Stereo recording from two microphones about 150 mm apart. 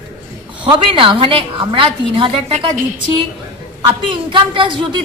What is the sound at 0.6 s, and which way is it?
A woman's voice, 35° right (ahead or behind).